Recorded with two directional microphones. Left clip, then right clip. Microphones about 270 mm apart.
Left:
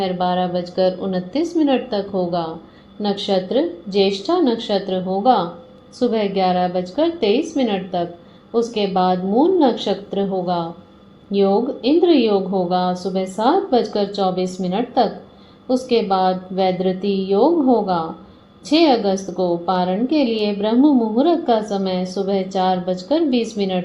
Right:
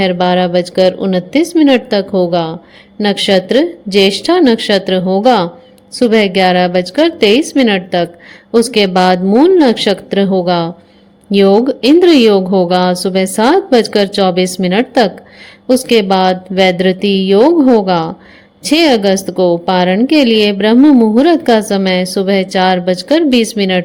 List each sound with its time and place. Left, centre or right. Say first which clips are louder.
0.2 s a woman's voice: right 8 dB; right